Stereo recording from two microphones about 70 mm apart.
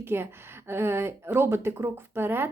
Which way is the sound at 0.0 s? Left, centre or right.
Right.